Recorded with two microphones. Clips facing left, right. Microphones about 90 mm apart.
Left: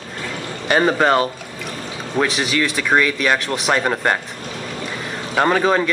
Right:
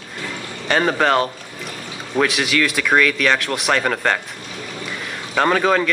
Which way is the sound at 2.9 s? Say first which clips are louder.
Even; 15° left (ahead or behind).